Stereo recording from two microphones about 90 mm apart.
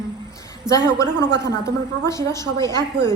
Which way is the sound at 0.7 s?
5° right (ahead or behind).